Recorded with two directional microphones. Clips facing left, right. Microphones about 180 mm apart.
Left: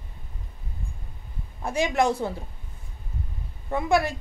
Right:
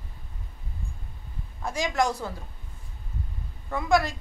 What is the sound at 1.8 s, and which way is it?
Speech, 25° left (ahead or behind).